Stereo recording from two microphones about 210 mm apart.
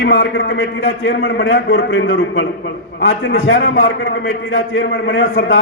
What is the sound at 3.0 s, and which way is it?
A man's voice, 75° left (ahead or behind).